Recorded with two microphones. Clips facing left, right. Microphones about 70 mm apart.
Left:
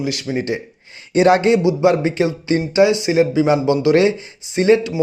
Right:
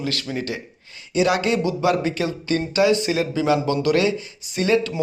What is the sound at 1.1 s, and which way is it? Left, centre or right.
Speech, left.